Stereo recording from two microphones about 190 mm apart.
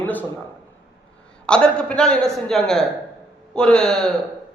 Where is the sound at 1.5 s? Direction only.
5° left (ahead or behind).